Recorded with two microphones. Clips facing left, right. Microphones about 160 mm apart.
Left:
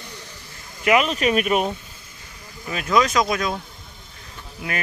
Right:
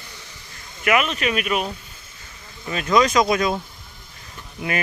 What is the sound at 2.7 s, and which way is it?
Speech, 5° left (ahead or behind).